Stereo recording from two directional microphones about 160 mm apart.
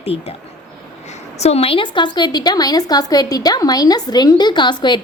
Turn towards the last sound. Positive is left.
turn(degrees=30)  # may be behind; listen again after turning